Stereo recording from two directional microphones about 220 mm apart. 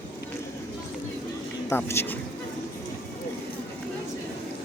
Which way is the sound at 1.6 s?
10° left (ahead or behind).